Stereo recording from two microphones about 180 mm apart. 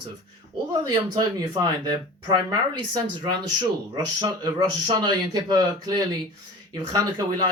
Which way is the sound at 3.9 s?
20° right (ahead or behind).